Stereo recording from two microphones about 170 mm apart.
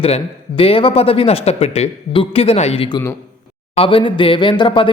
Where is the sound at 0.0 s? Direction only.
35° left (ahead or behind).